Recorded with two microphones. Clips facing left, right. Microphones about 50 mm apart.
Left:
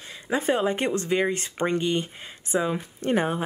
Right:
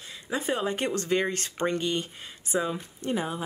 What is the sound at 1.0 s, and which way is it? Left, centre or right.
Speech, centre.